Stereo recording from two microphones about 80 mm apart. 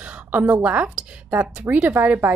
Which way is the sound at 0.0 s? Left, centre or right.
Centre.